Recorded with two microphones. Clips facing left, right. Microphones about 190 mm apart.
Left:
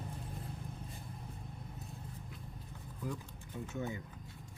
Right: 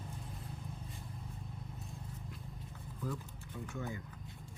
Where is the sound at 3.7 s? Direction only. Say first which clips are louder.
Left 3 dB; 20° left (ahead or behind).